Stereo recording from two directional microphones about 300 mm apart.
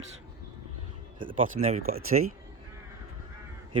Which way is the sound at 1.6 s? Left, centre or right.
Right.